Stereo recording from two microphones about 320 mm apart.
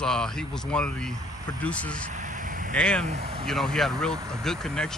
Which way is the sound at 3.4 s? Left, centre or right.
Centre.